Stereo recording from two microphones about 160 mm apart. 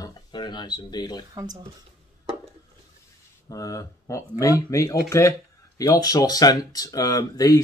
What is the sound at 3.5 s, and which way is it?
Speech, 20° left (ahead or behind).